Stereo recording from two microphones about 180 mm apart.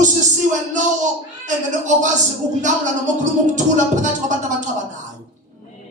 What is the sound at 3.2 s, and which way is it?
Speech, 45° right (ahead or behind).